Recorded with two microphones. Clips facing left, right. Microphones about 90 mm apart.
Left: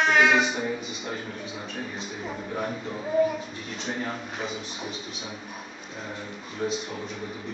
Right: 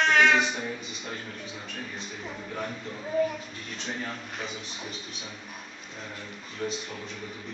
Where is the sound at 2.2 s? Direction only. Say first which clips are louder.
Left 4 dB; 15° left (ahead or behind).